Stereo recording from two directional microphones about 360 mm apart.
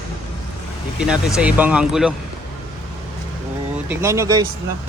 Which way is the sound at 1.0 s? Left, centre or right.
Centre.